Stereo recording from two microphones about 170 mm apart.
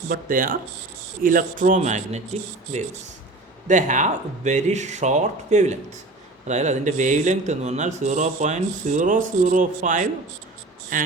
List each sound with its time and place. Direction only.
0.1 s speech: 55° right (ahead or behind)